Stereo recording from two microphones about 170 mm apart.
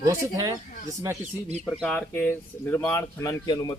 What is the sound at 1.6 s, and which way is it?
Speech, 5° left (ahead or behind).